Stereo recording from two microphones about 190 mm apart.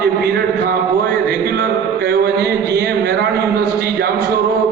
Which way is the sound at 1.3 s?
55° right (ahead or behind).